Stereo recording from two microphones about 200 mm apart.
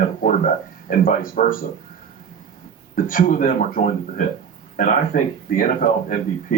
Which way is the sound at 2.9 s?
45° left (ahead or behind).